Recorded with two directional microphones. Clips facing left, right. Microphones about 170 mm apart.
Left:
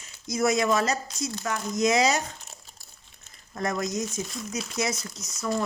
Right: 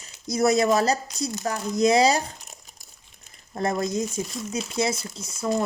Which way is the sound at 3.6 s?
30° right (ahead or behind).